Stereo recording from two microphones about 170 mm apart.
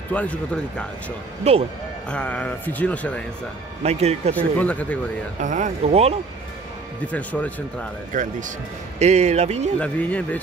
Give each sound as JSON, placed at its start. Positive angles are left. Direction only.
{"t": 0.1, "sound": "speech", "side_deg": 10}
{"t": 1.5, "sound": "speech", "side_deg": -40}
{"t": 2.0, "sound": "speech", "side_deg": 5}
{"t": 3.8, "sound": "speech", "side_deg": -40}
{"t": 4.4, "sound": "speech", "side_deg": 10}
{"t": 5.4, "sound": "speech", "side_deg": -45}
{"t": 7.1, "sound": "speech", "side_deg": 10}
{"t": 8.1, "sound": "speech", "side_deg": -50}
{"t": 9.8, "sound": "speech", "side_deg": 10}